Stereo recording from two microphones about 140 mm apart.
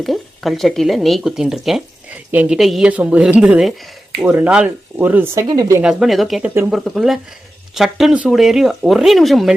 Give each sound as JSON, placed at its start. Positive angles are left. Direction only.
{"t": 0.0, "sound": "speech", "side_deg": 0}
{"t": 5.8, "sound": "speech", "side_deg": -5}